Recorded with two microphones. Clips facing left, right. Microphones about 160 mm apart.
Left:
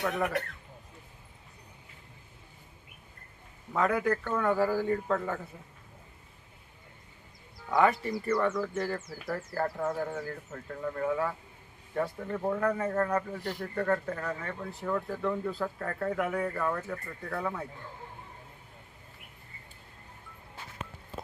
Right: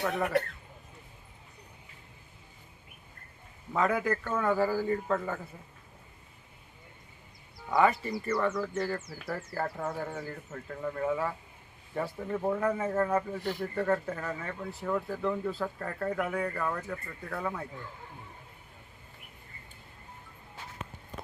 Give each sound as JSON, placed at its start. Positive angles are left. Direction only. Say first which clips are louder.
{"t": 0.1, "sound": "speech", "louder": "right 2 dB", "side_deg": -25}
{"t": 3.7, "sound": "speech", "louder": "left 1 dB", "side_deg": 0}
{"t": 7.7, "sound": "speech", "louder": "even", "side_deg": 0}